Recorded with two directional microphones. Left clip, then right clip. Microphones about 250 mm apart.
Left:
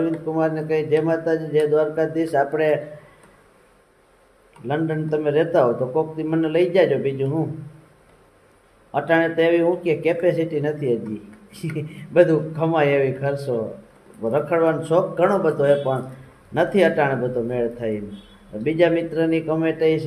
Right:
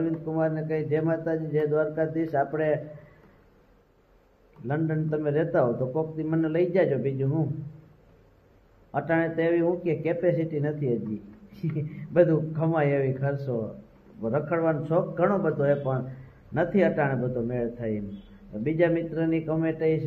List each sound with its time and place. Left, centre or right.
0.0 s speech: centre
4.6 s speech: centre
8.9 s speech: centre